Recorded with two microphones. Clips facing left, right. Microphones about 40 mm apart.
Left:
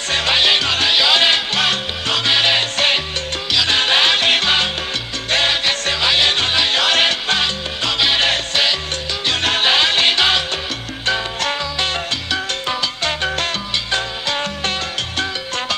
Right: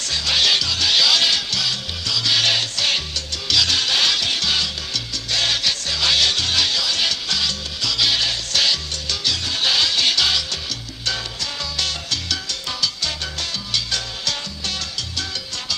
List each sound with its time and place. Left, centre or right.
0.3 s music: left
2.3 s music: left
3.5 s salsa music: left
5.3 s music: left
6.7 s music: left
9.6 s music: left
11.8 s salsa music: left